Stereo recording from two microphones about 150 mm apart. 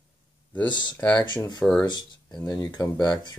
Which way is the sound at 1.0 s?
10° left (ahead or behind).